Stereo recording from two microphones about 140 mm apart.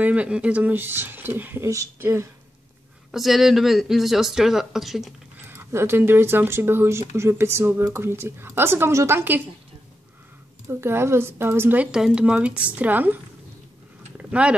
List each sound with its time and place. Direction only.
0.0 s speech: 10° right (ahead or behind)
3.1 s speech: centre (ahead or behind)
5.5 s speech: 15° right (ahead or behind)
10.7 s speech: 15° right (ahead or behind)
14.1 s a sound: 10° right (ahead or behind)